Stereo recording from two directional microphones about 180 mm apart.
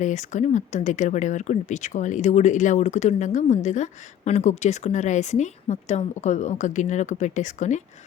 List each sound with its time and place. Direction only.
0.0 s speech: 40° left (ahead or behind)